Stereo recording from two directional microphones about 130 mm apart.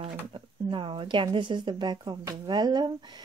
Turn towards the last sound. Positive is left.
turn(degrees=-30)  # may be behind; listen again after turning